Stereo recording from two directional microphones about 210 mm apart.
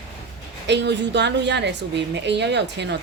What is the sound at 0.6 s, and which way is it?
Speech, 55° right (ahead or behind).